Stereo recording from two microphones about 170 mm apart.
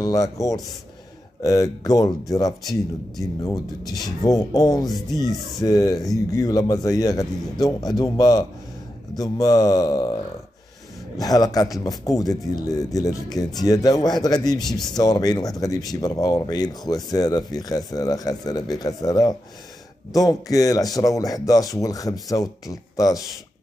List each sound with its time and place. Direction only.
0.0 s speech: 20° left (ahead or behind)
2.6 s speech: centre (ahead or behind)
4.2 s speech: 20° left (ahead or behind)
5.3 s speech: centre (ahead or behind)
5.7 s speech: 20° left (ahead or behind)
11.1 s speech: 25° left (ahead or behind)